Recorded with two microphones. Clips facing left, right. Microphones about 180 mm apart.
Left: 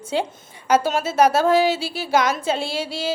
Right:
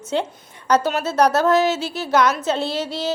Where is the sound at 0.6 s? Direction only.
5° left (ahead or behind).